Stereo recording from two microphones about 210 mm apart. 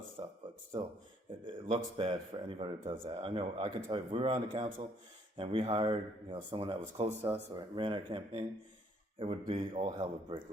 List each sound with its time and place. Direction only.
0.2 s speech: 25° right (ahead or behind)
1.5 s speech: 25° right (ahead or behind)